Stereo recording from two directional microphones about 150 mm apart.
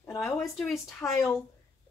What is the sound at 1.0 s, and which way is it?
Speech, 15° left (ahead or behind).